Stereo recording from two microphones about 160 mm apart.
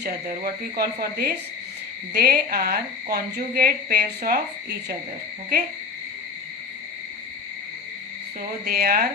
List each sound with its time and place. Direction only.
0.0 s speech: 70° right (ahead or behind)
8.4 s speech: 70° right (ahead or behind)